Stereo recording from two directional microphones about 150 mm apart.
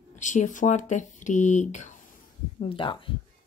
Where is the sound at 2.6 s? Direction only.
35° left (ahead or behind).